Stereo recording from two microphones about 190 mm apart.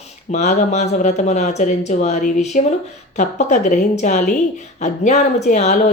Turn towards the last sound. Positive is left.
turn(degrees=40)  # may be behind; listen again after turning